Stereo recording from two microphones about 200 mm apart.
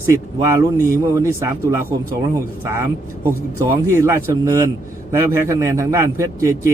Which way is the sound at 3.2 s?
10° right (ahead or behind).